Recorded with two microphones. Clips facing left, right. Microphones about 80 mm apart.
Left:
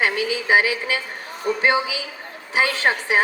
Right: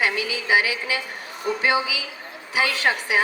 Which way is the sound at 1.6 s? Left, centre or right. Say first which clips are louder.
Left 2 dB; left.